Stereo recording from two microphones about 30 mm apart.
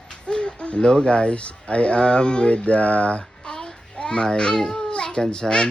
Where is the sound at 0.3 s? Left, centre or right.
Left.